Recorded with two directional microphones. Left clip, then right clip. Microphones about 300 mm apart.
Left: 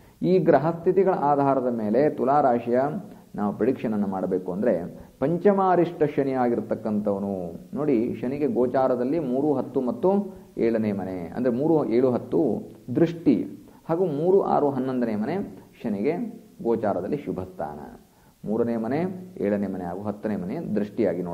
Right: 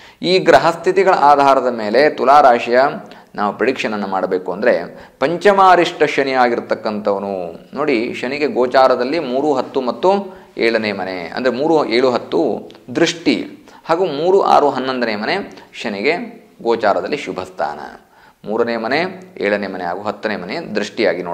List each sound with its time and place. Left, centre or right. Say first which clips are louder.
0.2 s speech: right 9 dB; centre
11.6 s speech: right 8 dB; right
11.9 s a man's voice: right 7 dB; centre